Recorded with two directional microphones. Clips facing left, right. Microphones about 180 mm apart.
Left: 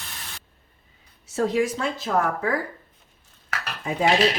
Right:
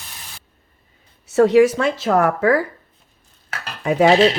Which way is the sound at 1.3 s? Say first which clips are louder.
Right 10 dB; 75° right (ahead or behind).